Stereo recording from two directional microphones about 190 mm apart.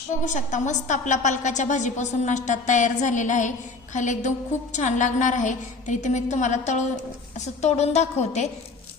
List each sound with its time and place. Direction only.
0.3 s a woman's voice: 40° left (ahead or behind)